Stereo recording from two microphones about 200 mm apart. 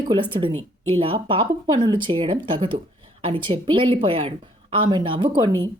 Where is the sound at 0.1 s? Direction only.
25° right (ahead or behind).